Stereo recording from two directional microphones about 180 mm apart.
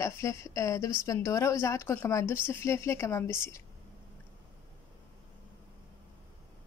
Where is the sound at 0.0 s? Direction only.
15° left (ahead or behind).